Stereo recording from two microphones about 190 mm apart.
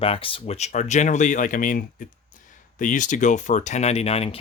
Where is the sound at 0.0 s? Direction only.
30° left (ahead or behind).